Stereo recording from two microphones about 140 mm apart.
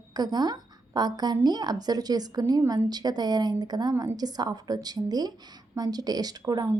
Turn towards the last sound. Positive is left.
turn(degrees=-25)  # may be behind; listen again after turning